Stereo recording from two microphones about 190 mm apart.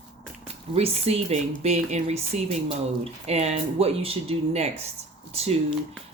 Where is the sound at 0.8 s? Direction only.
35° right (ahead or behind).